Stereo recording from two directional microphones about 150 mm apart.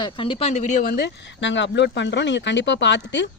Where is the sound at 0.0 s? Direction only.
35° left (ahead or behind); by 0.9 s 50° left (ahead or behind).